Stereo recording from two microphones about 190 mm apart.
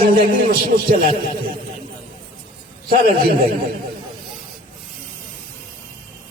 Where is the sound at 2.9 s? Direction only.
50° right (ahead or behind).